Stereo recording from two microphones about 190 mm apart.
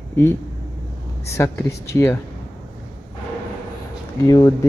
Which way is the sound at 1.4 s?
15° left (ahead or behind).